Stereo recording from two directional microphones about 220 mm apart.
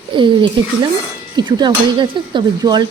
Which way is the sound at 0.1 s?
20° right (ahead or behind).